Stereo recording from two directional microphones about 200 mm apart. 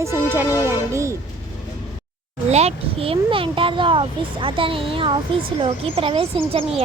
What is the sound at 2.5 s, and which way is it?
A child's voice, 30° right (ahead or behind).